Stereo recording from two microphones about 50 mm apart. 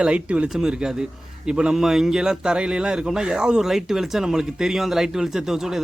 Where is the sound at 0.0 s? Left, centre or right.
Right.